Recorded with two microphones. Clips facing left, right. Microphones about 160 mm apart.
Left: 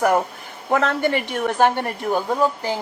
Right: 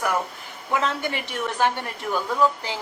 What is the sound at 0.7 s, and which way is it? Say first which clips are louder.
A woman's voice: left 6 dB; 60° left (ahead or behind).